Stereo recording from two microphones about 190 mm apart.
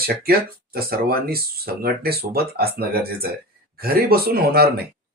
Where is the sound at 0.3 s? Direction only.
55° right (ahead or behind).